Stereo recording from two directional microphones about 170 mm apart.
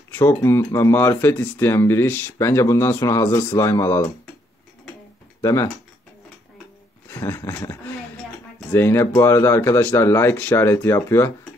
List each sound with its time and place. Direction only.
0.1 s speech: 15° left (ahead or behind)
5.4 s speech: 15° left (ahead or behind)
7.1 s a sound: 15° left (ahead or behind)
8.5 s speech: 15° left (ahead or behind)